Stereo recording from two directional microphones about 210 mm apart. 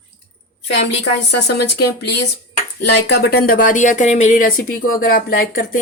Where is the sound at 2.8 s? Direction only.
50° left (ahead or behind).